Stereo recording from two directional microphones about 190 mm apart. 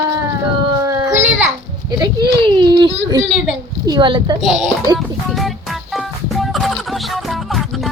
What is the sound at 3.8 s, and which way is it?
Speech, 25° right (ahead or behind).